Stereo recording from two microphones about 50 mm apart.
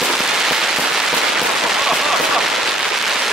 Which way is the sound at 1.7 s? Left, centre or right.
Centre.